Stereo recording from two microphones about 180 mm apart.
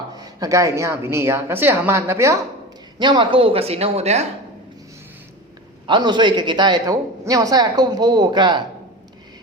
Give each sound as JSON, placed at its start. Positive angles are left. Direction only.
{"t": 0.2, "sound": "a woman's voice", "side_deg": -20}
{"t": 3.0, "sound": "speech", "side_deg": -25}
{"t": 5.8, "sound": "a woman's voice", "side_deg": -25}